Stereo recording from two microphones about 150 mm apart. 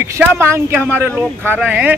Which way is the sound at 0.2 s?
15° right (ahead or behind).